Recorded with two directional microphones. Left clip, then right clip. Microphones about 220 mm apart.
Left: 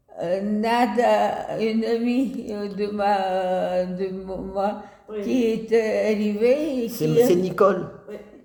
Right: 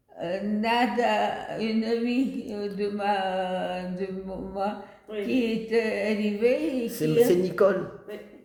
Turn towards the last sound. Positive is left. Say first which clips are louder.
# left 3 dB
turn(degrees=10)  # may be behind; listen again after turning